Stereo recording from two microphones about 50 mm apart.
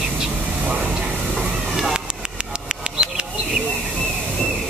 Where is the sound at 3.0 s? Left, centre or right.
Centre.